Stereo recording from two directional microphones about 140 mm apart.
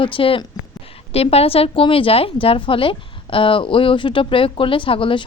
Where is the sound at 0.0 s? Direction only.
40° left (ahead or behind).